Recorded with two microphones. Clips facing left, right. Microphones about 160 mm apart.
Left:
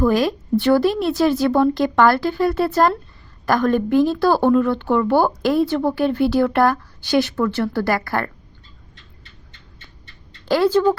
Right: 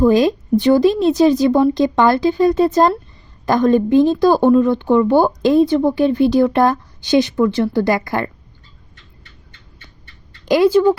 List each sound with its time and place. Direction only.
0.0 s a woman's voice: 20° right (ahead or behind)
10.4 s speech: 15° right (ahead or behind)